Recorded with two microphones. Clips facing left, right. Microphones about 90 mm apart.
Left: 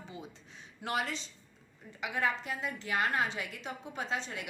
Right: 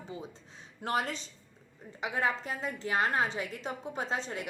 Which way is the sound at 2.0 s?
30° right (ahead or behind).